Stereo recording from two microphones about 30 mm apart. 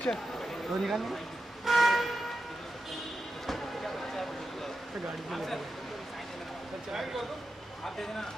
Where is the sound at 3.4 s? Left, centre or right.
Centre.